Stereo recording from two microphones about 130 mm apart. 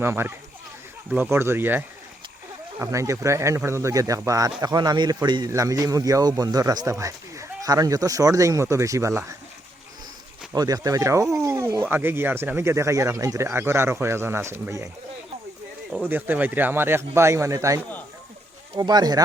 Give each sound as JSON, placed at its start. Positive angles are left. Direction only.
{"t": 0.0, "sound": "speech", "side_deg": -20}
{"t": 10.5, "sound": "speech", "side_deg": -30}
{"t": 15.9, "sound": "speech", "side_deg": -15}
{"t": 18.8, "sound": "speech", "side_deg": -30}